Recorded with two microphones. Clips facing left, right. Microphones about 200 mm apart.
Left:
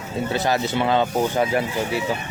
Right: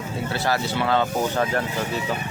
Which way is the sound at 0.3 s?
20° left (ahead or behind).